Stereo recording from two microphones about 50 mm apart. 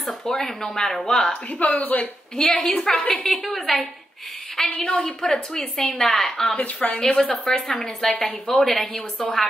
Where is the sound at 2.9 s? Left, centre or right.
Left.